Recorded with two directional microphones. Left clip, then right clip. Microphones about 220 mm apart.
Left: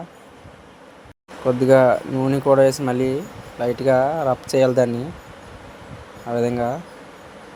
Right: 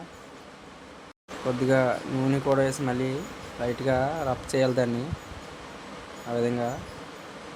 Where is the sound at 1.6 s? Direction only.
20° left (ahead or behind).